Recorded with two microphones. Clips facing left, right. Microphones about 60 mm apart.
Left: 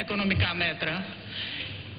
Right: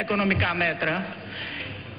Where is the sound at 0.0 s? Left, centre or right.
Right.